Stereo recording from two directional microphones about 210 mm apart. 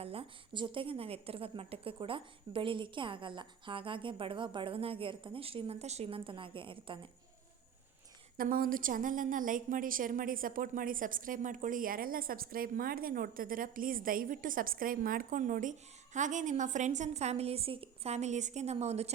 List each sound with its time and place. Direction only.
0.0 s a woman's voice: 25° right (ahead or behind)
8.4 s a woman's voice: 45° right (ahead or behind)